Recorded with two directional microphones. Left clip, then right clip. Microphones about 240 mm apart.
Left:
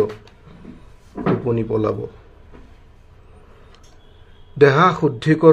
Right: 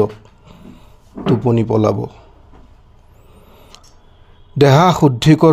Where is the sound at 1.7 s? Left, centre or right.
Right.